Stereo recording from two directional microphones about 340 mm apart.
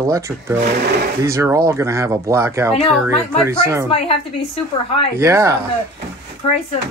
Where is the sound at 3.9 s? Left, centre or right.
Centre.